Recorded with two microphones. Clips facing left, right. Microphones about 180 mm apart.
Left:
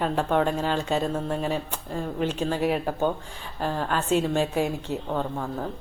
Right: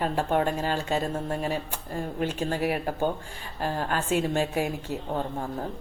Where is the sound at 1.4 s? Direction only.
10° right (ahead or behind).